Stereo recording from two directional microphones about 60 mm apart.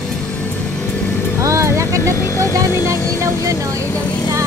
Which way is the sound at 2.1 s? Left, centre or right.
Left.